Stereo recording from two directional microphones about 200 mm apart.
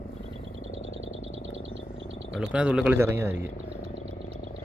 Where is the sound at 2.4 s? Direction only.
5° right (ahead or behind).